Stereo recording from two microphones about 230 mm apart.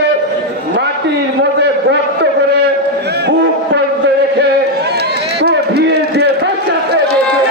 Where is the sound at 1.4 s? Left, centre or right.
Right.